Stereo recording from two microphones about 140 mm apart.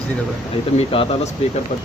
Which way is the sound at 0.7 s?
40° left (ahead or behind).